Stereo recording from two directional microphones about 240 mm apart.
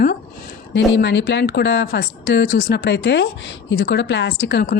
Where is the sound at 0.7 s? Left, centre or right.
Left.